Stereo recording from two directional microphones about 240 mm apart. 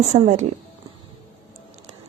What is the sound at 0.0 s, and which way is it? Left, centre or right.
Speech, right.